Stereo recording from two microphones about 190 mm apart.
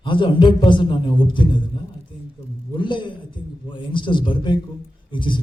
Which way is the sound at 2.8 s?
25° left (ahead or behind).